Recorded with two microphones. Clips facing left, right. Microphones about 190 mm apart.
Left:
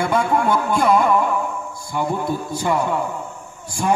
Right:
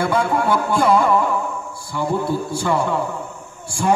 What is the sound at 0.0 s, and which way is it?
Speech, 20° left (ahead or behind).